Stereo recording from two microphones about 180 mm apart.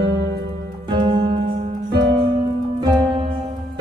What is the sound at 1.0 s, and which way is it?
Music, 25° right (ahead or behind).